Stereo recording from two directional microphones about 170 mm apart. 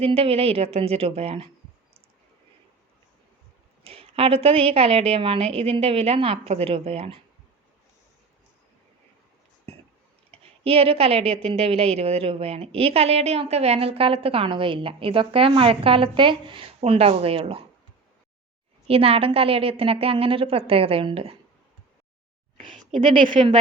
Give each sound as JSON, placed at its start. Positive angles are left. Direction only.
{"t": 0.0, "sound": "a woman's voice", "side_deg": -35}
{"t": 3.8, "sound": "a woman's voice", "side_deg": -35}
{"t": 10.6, "sound": "a woman's voice", "side_deg": -35}
{"t": 18.9, "sound": "a woman's voice", "side_deg": -35}
{"t": 23.0, "sound": "speech", "side_deg": -30}